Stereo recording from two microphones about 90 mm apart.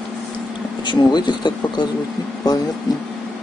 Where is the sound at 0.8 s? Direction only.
55° left (ahead or behind).